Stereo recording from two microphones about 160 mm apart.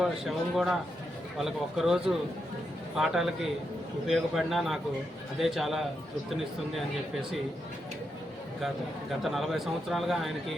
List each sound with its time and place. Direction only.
0.0 s a man's voice: centre (ahead or behind)
9.2 s a man's voice: centre (ahead or behind)